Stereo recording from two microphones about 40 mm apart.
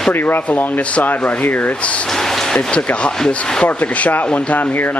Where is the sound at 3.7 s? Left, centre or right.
Left.